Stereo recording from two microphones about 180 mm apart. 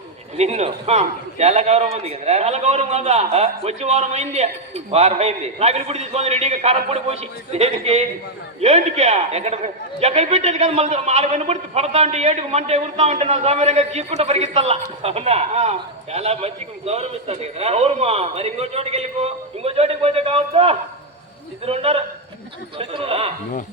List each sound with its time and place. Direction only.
0.3 s a man's voice: 35° right (ahead or behind)